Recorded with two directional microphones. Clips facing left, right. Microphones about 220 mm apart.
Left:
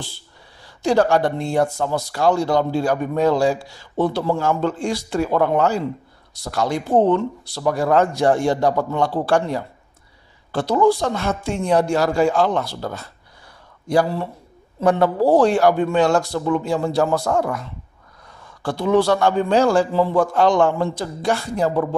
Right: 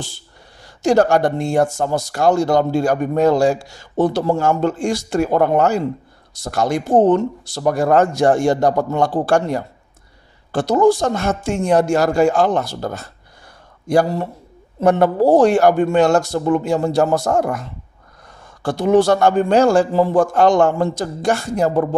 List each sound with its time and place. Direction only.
0.8 s a man's voice: 45° right (ahead or behind)